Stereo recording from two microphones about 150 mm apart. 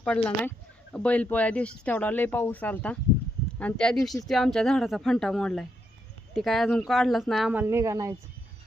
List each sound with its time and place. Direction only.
0.0 s speech: 10° left (ahead or behind)
7.5 s speech: 15° right (ahead or behind)